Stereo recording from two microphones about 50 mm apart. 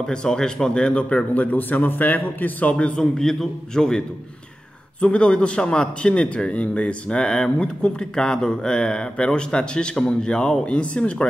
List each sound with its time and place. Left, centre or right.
0.0 s a man's voice: centre
1.4 s a man's voice: left
2.7 s a man's voice: centre
5.0 s a man's voice: left